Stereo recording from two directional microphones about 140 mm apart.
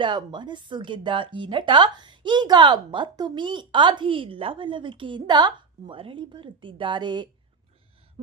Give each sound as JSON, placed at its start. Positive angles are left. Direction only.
{"t": 0.0, "sound": "speech", "side_deg": -35}